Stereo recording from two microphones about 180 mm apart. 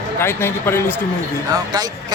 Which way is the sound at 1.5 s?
20° right (ahead or behind).